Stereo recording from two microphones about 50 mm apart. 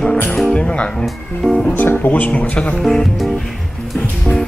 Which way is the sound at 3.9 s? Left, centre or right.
Left.